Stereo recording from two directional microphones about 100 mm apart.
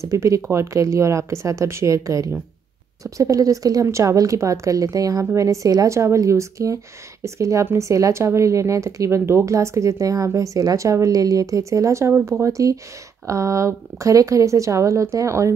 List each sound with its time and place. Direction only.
0.0 s speech: 30° right (ahead or behind)